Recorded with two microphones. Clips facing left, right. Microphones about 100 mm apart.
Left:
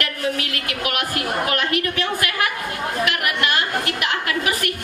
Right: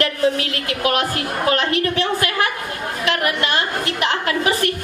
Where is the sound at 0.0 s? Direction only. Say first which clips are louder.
Right 6 dB; 30° right (ahead or behind).